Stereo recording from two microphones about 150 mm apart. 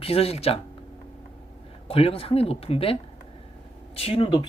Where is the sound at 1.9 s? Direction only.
40° left (ahead or behind).